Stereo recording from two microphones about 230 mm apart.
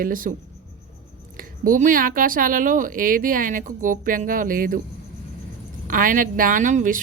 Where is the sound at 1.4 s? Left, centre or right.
Right.